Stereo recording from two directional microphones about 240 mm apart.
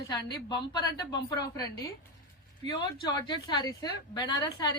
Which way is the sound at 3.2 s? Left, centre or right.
Centre.